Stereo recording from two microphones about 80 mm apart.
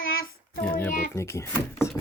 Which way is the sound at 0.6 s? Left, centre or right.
Centre.